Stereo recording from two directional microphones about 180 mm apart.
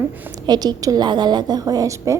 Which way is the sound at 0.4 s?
20° right (ahead or behind).